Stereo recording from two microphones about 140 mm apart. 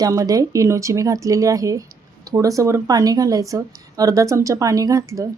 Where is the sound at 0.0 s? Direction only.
25° right (ahead or behind).